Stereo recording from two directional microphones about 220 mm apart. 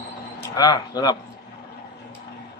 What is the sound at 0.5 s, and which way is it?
Speech, 15° left (ahead or behind).